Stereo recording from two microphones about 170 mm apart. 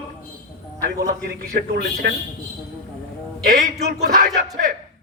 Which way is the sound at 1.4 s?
65° right (ahead or behind).